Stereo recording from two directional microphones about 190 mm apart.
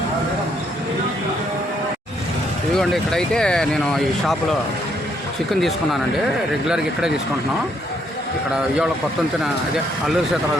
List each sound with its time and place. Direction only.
2.7 s speech: centre (ahead or behind)
5.5 s speech: centre (ahead or behind)